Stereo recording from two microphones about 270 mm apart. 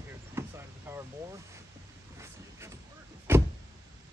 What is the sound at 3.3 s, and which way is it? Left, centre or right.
Vehicle, centre.